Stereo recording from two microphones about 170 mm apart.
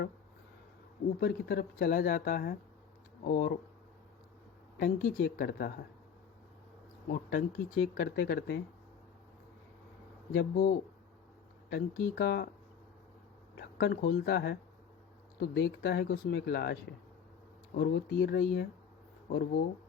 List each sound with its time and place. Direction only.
1.2 s speech: 70° left (ahead or behind)
4.8 s speech: 60° left (ahead or behind)
7.1 s speech: 60° left (ahead or behind)
7.9 s speech: 75° left (ahead or behind)
10.3 s speech: 70° left (ahead or behind)
13.6 s speech: 70° left (ahead or behind)
17.7 s speech: 75° left (ahead or behind)